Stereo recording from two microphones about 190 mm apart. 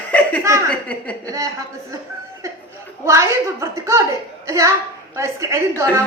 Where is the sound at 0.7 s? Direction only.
5° left (ahead or behind).